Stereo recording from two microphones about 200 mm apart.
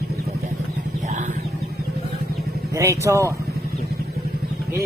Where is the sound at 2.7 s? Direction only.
15° right (ahead or behind).